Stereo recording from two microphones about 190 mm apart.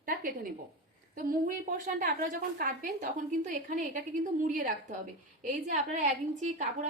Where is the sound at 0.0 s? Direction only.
45° right (ahead or behind).